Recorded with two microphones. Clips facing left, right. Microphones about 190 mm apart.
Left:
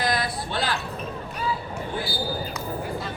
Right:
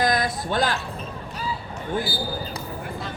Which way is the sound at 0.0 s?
45° right (ahead or behind).